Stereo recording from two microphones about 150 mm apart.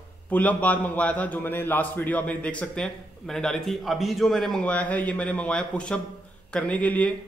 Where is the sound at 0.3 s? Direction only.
10° left (ahead or behind).